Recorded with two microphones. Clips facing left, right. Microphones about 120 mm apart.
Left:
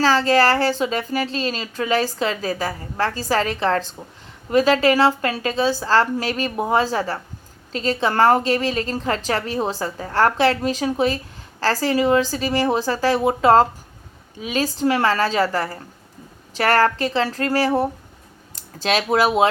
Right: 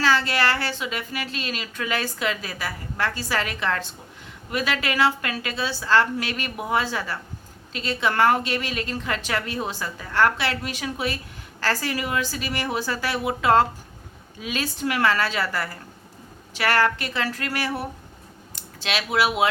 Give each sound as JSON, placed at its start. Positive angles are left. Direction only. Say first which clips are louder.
{"t": 0.0, "sound": "speech", "louder": "left 6 dB", "side_deg": 35}
{"t": 14.3, "sound": "a woman's voice", "louder": "left 6 dB", "side_deg": 25}